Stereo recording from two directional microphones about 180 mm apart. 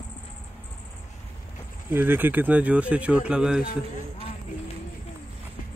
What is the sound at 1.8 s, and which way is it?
Speech, 10° right (ahead or behind).